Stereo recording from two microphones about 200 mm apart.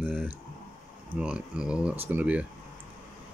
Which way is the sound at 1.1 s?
5° right (ahead or behind).